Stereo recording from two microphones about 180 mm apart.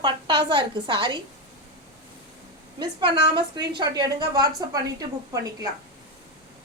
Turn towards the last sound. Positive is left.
turn(degrees=-20)  # may be behind; listen again after turning